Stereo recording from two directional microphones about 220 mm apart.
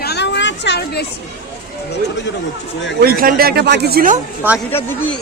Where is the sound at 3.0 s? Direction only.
40° right (ahead or behind).